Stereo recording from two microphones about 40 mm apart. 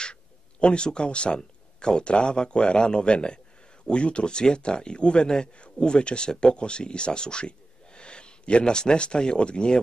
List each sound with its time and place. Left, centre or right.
0.0 s speech: left